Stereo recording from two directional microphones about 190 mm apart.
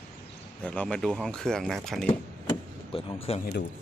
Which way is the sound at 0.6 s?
5° left (ahead or behind).